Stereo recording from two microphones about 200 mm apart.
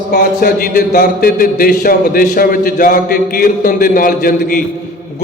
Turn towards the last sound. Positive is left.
turn(degrees=45)  # may be behind; listen again after turning